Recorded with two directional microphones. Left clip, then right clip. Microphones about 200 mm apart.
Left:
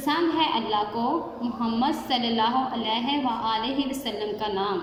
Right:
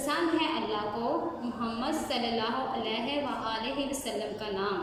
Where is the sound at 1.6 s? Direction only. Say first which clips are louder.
Left 6 dB; 35° left (ahead or behind).